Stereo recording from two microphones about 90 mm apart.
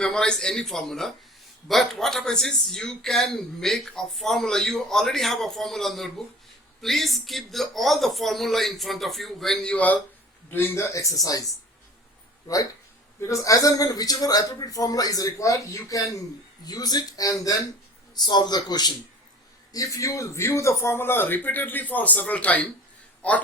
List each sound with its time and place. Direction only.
0.0 s a man's voice: 10° left (ahead or behind)
10.5 s a man's voice: 30° left (ahead or behind)
13.1 s a man's voice: 35° left (ahead or behind); by 18.9 s 50° left (ahead or behind)
19.7 s a man's voice: 40° left (ahead or behind); by 23.4 s 15° left (ahead or behind)